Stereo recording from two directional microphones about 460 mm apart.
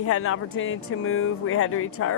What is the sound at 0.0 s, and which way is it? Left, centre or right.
Speech, left.